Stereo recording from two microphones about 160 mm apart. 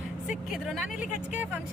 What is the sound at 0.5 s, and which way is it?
Speech, centre (ahead or behind).